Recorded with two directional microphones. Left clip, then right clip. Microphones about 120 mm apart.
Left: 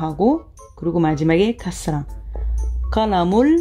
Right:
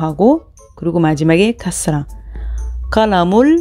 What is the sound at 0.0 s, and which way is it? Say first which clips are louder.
Speech: right 6 dB; 30° right (ahead or behind).